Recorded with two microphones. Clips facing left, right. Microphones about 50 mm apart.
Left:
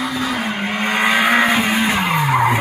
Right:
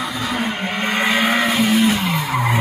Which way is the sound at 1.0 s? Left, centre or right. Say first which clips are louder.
Left 3 dB; centre.